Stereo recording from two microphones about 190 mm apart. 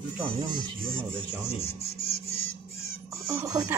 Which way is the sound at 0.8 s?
5° left (ahead or behind).